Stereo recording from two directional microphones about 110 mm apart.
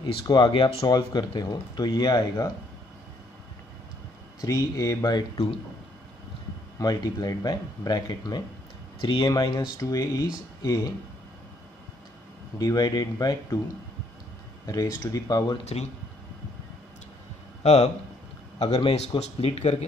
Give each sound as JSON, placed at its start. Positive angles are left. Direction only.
{"t": 0.0, "sound": "speech", "side_deg": 45}
{"t": 0.8, "sound": "speech", "side_deg": 40}
{"t": 4.4, "sound": "speech", "side_deg": 30}
{"t": 6.8, "sound": "speech", "side_deg": 35}
{"t": 12.5, "sound": "speech", "side_deg": 35}
{"t": 14.7, "sound": "speech", "side_deg": 30}
{"t": 15.6, "sound": "speech", "side_deg": 90}
{"t": 17.6, "sound": "speech", "side_deg": 90}
{"t": 18.8, "sound": "speech", "side_deg": 65}